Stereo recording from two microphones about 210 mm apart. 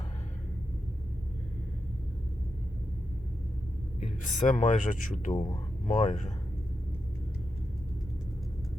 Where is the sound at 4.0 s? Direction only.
35° left (ahead or behind).